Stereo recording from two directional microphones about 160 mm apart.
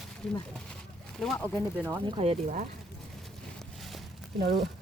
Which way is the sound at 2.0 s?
35° right (ahead or behind).